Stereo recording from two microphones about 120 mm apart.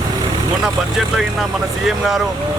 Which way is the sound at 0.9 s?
Centre (ahead or behind).